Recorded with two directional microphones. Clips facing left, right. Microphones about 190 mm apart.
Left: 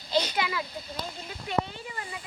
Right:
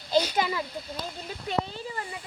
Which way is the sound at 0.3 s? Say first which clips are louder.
Right 3 dB; 35° right (ahead or behind).